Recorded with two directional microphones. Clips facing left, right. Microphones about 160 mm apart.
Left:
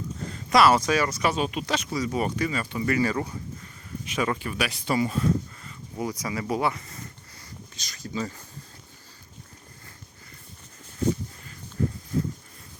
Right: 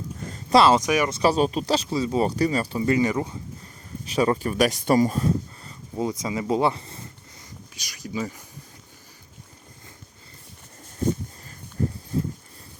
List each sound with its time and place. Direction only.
0.3 s speech: 25° right (ahead or behind)
1.2 s speech: 35° right (ahead or behind)
2.8 s speech: 20° right (ahead or behind)
4.0 s speech: 35° right (ahead or behind)
6.0 s speech: 25° right (ahead or behind)
7.8 s speech: 10° right (ahead or behind)